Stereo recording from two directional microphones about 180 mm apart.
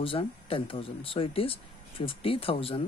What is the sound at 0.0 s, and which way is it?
Speech, 30° left (ahead or behind).